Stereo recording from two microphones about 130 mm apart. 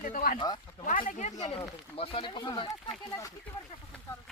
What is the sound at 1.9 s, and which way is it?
Speech, 45° left (ahead or behind).